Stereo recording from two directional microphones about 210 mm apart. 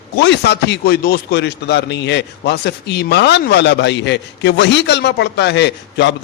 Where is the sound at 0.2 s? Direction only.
55° left (ahead or behind).